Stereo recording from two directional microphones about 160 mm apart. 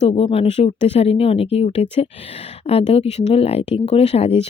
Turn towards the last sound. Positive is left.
turn(degrees=40)  # may be behind; listen again after turning